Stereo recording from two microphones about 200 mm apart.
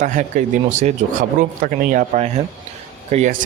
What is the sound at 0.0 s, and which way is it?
Speech, 40° right (ahead or behind).